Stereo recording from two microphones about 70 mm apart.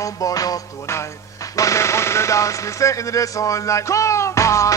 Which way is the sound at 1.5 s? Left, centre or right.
Left.